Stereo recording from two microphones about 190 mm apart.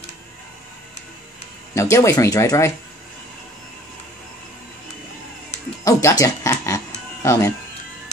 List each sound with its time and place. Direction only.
1.8 s speech: 15° left (ahead or behind)
5.9 s speech: 15° left (ahead or behind)